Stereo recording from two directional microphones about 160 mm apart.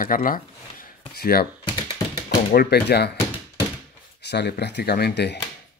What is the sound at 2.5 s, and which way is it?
Speech, 80° left.